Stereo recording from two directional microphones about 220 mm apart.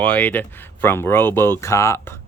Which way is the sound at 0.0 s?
5° left (ahead or behind).